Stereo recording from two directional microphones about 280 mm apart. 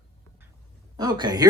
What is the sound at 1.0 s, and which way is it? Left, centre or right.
Speech, centre.